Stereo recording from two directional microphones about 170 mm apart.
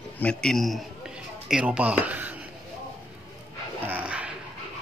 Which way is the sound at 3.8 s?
10° right (ahead or behind).